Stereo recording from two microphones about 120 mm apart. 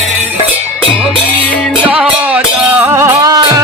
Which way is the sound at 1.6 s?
10° right (ahead or behind).